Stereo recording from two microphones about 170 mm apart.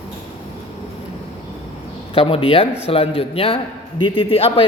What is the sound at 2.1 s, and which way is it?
A man's voice, 35° left (ahead or behind).